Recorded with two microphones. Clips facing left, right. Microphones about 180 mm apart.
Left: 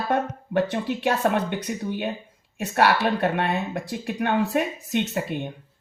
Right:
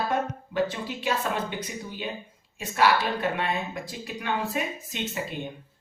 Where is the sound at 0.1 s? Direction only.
65° left (ahead or behind).